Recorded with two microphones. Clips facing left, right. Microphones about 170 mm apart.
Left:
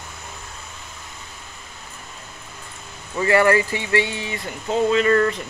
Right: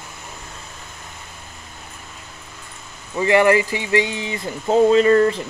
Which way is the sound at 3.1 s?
20° right (ahead or behind).